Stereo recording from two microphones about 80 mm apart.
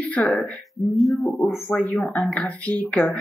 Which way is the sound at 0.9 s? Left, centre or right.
Centre.